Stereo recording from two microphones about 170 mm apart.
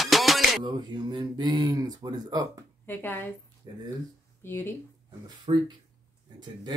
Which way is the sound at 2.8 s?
10° left (ahead or behind).